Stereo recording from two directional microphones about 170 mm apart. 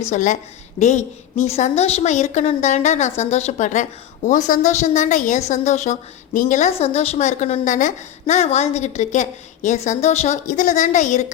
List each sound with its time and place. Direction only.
0.0 s a woman's voice: 45° left (ahead or behind)